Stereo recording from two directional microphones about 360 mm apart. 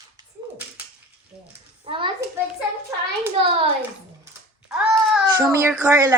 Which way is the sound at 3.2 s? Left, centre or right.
Centre.